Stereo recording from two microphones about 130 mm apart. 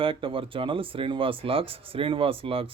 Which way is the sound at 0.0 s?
45° right (ahead or behind).